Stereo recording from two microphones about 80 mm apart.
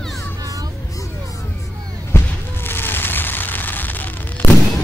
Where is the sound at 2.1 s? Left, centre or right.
Left.